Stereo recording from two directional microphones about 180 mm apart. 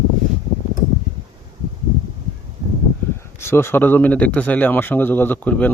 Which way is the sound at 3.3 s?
15° left (ahead or behind).